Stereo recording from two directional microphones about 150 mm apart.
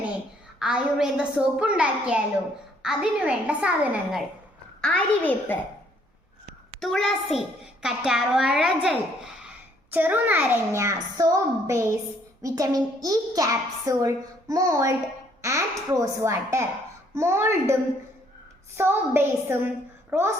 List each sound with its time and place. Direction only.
0.6 s a child's voice: 5° right (ahead or behind)
4.8 s a child's voice: 10° left (ahead or behind)
6.7 s a child's voice: centre (ahead or behind); by 17.7 s 15° right (ahead or behind)
18.8 s a child's voice: 15° right (ahead or behind)